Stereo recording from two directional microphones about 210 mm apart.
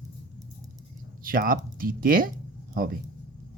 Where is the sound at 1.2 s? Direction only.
40° right (ahead or behind).